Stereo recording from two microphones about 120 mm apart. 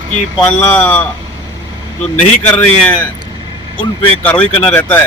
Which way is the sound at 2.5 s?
10° left (ahead or behind).